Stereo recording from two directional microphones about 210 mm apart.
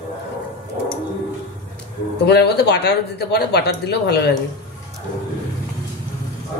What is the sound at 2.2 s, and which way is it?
A man's voice, 50° left (ahead or behind).